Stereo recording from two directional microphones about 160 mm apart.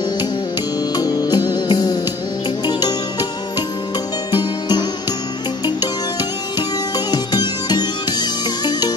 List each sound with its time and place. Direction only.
0.9 s music: 25° left (ahead or behind)
7.1 s music: 25° left (ahead or behind)